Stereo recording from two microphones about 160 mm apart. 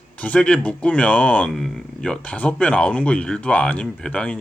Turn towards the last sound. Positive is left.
turn(degrees=5)  # may be behind; listen again after turning